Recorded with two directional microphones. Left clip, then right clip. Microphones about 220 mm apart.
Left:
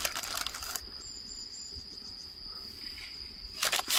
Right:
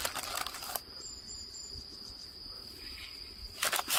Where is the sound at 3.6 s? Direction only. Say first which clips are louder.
Left 2 dB; centre (ahead or behind).